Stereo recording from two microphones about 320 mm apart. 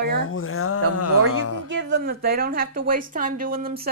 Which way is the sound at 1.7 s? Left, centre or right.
Right.